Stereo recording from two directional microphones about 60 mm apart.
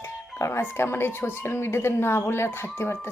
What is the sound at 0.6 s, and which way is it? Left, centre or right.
Speech, left.